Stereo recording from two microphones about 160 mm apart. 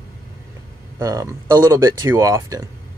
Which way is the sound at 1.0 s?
20° right (ahead or behind).